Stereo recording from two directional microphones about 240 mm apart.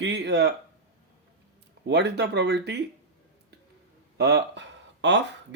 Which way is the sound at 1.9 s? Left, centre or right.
Right.